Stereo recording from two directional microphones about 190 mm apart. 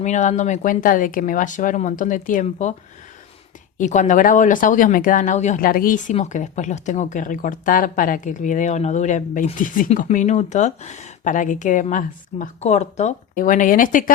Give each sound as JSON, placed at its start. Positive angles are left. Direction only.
{"t": 0.0, "sound": "speech", "side_deg": 40}
{"t": 3.8, "sound": "speech", "side_deg": 40}